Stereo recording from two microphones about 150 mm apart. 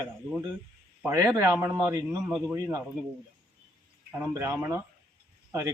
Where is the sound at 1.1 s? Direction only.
25° right (ahead or behind).